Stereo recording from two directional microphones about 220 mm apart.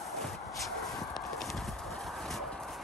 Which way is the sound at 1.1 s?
Centre (ahead or behind).